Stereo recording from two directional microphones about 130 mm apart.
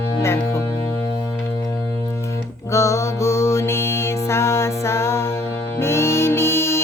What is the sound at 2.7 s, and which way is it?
Mantra, 25° left (ahead or behind).